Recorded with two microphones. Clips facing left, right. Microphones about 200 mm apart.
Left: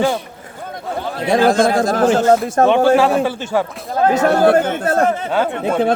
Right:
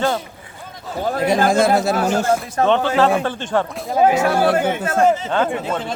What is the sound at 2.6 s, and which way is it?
Speech, 50° left (ahead or behind).